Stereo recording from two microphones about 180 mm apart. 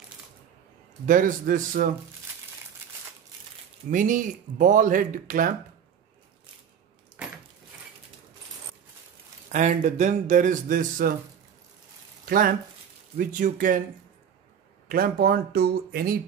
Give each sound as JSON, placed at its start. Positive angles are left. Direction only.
{"t": 1.0, "sound": "speech", "side_deg": -50}
{"t": 3.9, "sound": "speech", "side_deg": -45}
{"t": 9.5, "sound": "speech", "side_deg": -45}
{"t": 12.3, "sound": "speech", "side_deg": -55}
{"t": 14.9, "sound": "speech", "side_deg": -55}